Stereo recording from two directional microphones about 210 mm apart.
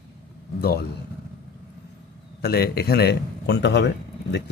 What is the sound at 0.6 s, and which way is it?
Speech, 45° left (ahead or behind).